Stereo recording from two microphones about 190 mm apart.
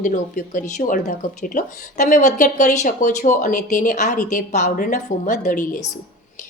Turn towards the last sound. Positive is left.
turn(degrees=40)  # may be behind; listen again after turning